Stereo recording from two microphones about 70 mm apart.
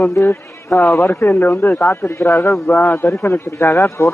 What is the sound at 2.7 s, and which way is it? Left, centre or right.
Speech, left.